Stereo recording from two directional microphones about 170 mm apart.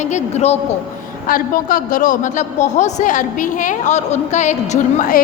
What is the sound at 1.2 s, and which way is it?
A woman's voice, 55° left (ahead or behind).